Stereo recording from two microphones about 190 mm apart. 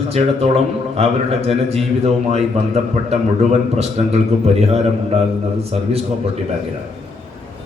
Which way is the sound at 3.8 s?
35° right (ahead or behind).